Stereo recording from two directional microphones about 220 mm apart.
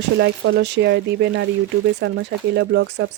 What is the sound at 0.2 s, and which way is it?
Speech, 55° right (ahead or behind).